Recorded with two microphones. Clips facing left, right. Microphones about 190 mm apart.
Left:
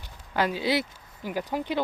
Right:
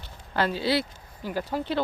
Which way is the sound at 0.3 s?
15° left (ahead or behind).